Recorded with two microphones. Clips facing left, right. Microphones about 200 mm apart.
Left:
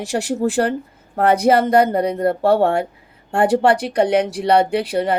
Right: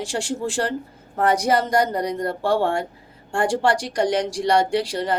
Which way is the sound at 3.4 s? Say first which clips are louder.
Left 6 dB; 60° left (ahead or behind).